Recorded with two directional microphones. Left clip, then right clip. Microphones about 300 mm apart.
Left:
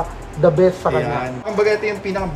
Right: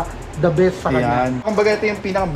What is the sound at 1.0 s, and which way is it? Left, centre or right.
Speech, centre.